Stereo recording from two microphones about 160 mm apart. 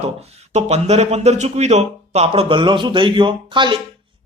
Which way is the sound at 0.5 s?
40° right (ahead or behind).